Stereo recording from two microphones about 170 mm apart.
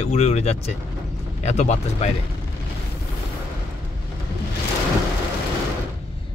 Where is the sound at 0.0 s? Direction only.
40° left (ahead or behind).